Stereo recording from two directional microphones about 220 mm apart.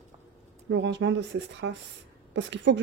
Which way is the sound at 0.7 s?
55° right (ahead or behind).